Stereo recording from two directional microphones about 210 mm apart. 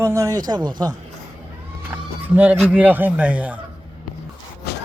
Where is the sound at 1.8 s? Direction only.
10° right (ahead or behind).